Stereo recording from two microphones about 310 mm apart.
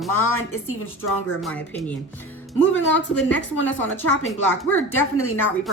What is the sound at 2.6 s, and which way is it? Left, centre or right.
Speech, left.